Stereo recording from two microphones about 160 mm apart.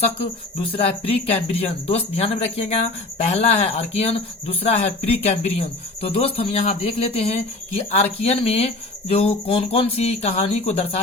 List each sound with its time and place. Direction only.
0.8 s speech: 40° left (ahead or behind)